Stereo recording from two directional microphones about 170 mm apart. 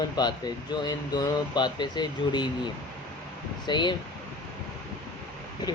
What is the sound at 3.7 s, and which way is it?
Speech, 25° left (ahead or behind).